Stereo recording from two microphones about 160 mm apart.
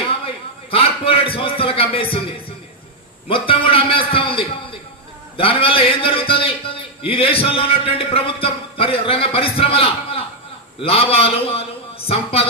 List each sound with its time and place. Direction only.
0.7 s a man's voice: 35° left (ahead or behind)
3.2 s a sound: 35° left (ahead or behind)
5.4 s a man's voice: 35° left (ahead or behind)